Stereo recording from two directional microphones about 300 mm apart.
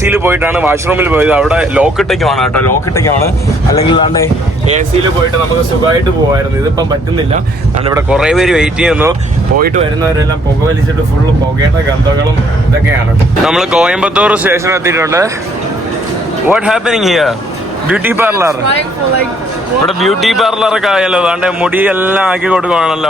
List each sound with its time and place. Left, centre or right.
0.0 s speech: centre
7.9 s speech: centre
13.4 s speech: centre
16.5 s a man's voice: centre
20.0 s speech: centre